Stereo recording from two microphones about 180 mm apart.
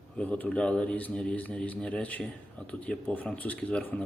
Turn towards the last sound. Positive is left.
turn(degrees=5)  # may be behind; listen again after turning